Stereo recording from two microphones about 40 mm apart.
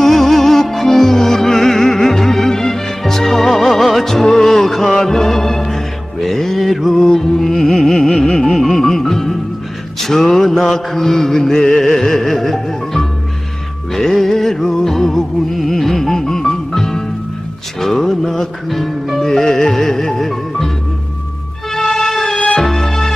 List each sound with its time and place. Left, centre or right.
0.0 s music: centre
9.9 s mantra: centre
13.9 s music: centre
21.7 s music: centre
22.4 s music: left
22.7 s music: centre